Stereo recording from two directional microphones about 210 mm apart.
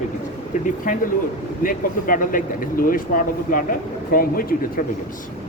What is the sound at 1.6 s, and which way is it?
Speech, 40° left (ahead or behind).